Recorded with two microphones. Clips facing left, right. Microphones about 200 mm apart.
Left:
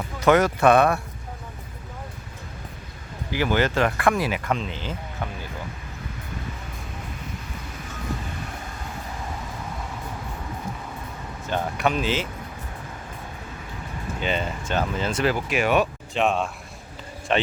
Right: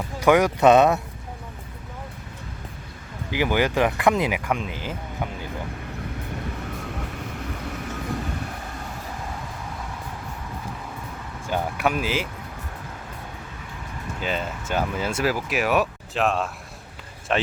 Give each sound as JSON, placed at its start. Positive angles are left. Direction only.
{"t": 0.2, "sound": "speech", "side_deg": -15}
{"t": 3.3, "sound": "speech", "side_deg": -15}
{"t": 11.4, "sound": "speech", "side_deg": -10}
{"t": 14.2, "sound": "speech", "side_deg": 0}